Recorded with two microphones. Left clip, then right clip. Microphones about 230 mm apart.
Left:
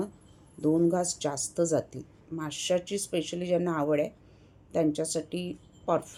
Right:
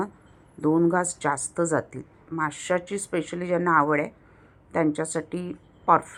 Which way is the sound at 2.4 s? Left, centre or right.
Centre.